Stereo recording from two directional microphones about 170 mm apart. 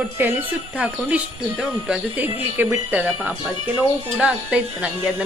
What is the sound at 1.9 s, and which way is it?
A woman's voice, 10° right (ahead or behind).